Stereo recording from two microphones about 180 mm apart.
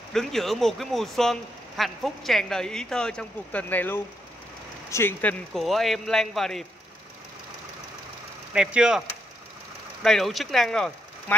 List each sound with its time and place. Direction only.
0.1 s speech: centre (ahead or behind)
5.5 s speech: centre (ahead or behind)
8.5 s speech: 5° right (ahead or behind)
10.0 s speech: centre (ahead or behind)